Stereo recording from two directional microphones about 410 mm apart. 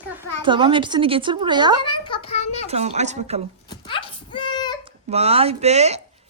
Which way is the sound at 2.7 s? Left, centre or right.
Centre.